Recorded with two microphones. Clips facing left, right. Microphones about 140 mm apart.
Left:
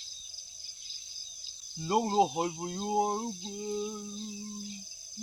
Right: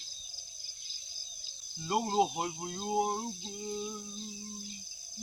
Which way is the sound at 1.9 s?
25° left (ahead or behind).